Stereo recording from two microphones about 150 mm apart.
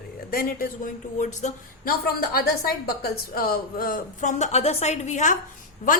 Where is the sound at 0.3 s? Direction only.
70° left (ahead or behind); by 1.9 s 55° left (ahead or behind).